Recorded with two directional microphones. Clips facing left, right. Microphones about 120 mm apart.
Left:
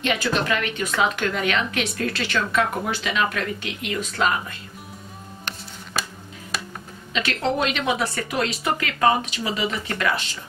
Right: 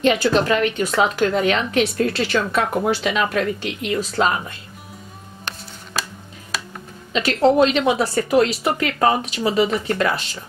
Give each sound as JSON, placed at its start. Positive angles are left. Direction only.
{"t": 0.0, "sound": "speech", "side_deg": -35}
{"t": 7.1, "sound": "speech", "side_deg": -35}